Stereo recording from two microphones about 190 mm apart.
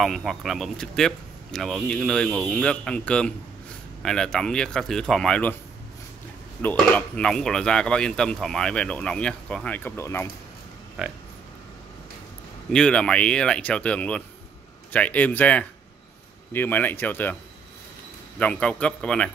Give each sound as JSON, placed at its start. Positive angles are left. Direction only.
{"t": 0.0, "sound": "speech", "side_deg": 0}
{"t": 6.6, "sound": "speech", "side_deg": 10}
{"t": 11.0, "sound": "speech", "side_deg": -5}
{"t": 12.7, "sound": "speech", "side_deg": 5}
{"t": 18.4, "sound": "speech", "side_deg": 5}